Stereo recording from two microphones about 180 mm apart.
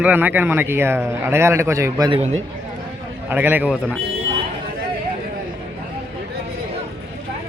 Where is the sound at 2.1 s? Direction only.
35° right (ahead or behind).